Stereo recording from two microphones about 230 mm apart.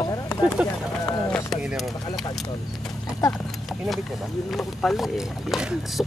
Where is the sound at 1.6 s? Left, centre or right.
Centre.